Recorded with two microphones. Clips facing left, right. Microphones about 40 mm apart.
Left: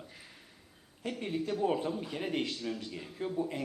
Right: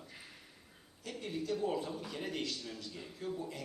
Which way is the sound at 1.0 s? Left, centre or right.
Left.